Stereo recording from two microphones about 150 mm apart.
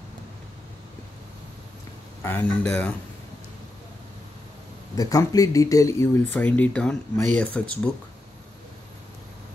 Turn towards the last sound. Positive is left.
turn(degrees=10)  # may be behind; listen again after turning